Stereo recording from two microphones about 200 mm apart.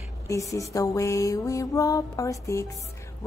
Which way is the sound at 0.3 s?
15° left (ahead or behind).